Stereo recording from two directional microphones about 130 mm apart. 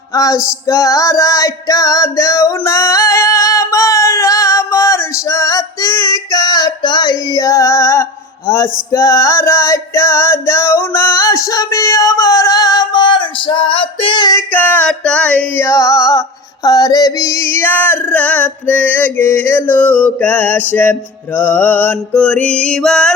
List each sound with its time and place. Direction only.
0.1 s music: 25° left (ahead or behind)
14.3 s music: 15° left (ahead or behind)
15.6 s music: 25° left (ahead or behind)
16.6 s female singing: 30° left (ahead or behind); by 23.1 s 5° left (ahead or behind)